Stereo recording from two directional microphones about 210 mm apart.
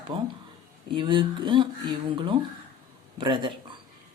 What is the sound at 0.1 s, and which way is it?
Speech, 25° right (ahead or behind).